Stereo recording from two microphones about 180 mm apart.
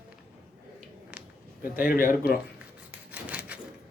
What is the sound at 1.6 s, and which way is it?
Speech, 50° left (ahead or behind).